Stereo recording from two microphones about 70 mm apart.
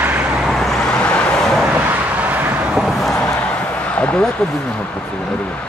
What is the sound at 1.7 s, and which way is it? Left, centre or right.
Vehicle, right.